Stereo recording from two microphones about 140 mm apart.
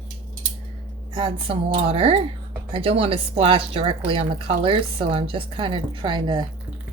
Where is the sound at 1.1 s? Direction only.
40° right (ahead or behind).